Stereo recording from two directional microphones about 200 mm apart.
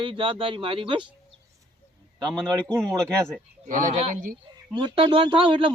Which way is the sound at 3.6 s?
40° right (ahead or behind).